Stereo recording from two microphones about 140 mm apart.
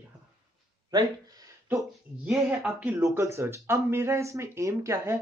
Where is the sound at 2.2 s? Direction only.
5° right (ahead or behind).